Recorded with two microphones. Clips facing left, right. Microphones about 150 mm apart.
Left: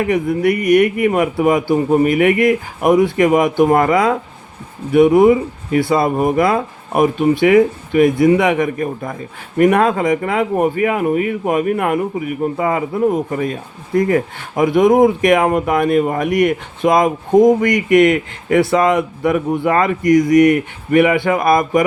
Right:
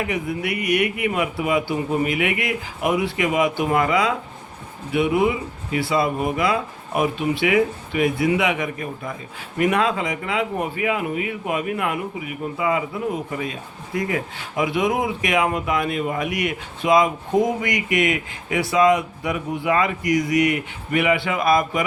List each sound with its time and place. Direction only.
0.0 s a man's voice: 45° left (ahead or behind)